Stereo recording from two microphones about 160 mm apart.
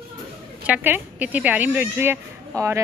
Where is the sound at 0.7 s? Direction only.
10° right (ahead or behind).